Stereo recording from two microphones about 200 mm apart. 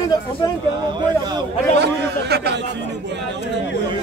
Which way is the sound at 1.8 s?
55° right (ahead or behind).